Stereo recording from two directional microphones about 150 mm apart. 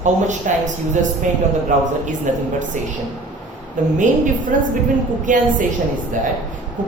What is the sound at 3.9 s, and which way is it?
A woman's voice, 60° right (ahead or behind).